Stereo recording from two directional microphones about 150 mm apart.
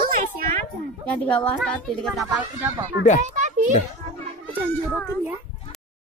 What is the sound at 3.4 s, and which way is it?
Children playing, 55° right (ahead or behind).